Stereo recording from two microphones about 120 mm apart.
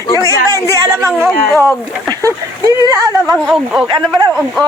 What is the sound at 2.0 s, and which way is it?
Speech, 30° right (ahead or behind).